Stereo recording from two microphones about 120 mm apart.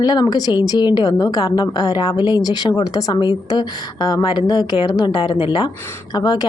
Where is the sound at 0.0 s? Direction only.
35° left (ahead or behind).